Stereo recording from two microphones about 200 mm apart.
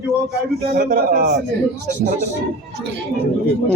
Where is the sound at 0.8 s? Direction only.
50° right (ahead or behind).